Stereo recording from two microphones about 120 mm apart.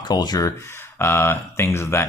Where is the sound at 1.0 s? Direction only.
20° left (ahead or behind).